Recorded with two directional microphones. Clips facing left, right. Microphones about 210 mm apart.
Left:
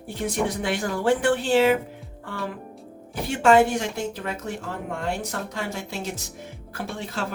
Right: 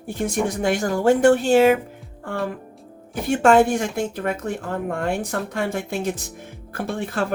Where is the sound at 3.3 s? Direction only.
50° right (ahead or behind).